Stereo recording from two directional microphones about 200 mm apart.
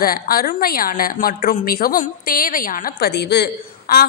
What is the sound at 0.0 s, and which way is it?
A woman's voice, 50° left (ahead or behind).